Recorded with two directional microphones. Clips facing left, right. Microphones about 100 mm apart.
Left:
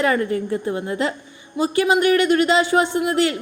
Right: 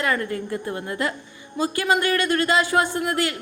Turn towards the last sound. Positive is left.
turn(degrees=20)  # may be behind; listen again after turning